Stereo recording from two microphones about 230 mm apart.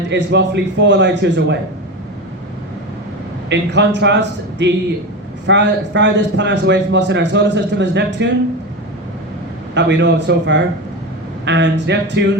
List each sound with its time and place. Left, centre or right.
0.1 s a man's voice: right
3.5 s a man's voice: right
9.7 s a man's voice: right